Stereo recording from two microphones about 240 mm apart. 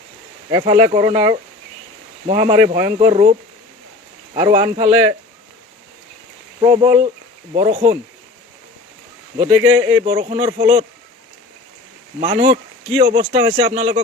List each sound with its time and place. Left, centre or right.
0.5 s speech: centre
4.4 s speech: centre
6.6 s speech: right
9.6 s speech: centre
10.0 s speech: right
12.2 s speech: right